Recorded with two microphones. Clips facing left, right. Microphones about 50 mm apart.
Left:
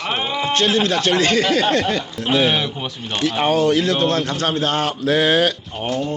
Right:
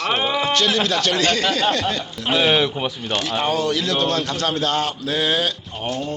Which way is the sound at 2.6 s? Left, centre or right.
Centre.